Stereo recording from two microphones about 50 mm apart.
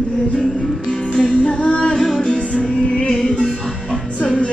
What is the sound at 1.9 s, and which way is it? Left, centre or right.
Music, centre.